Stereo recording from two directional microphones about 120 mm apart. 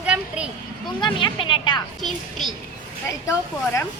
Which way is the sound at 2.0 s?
Centre (ahead or behind).